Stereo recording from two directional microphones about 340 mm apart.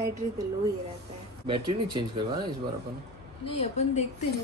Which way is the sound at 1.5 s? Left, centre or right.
Centre.